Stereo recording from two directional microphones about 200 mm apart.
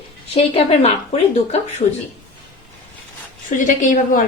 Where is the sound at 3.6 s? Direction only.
40° left (ahead or behind).